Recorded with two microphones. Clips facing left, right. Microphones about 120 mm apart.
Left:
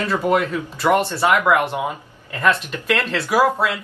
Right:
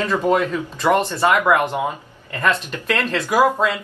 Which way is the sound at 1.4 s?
20° right (ahead or behind).